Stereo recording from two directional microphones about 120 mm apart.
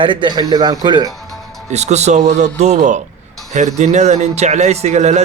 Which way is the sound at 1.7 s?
70° right (ahead or behind).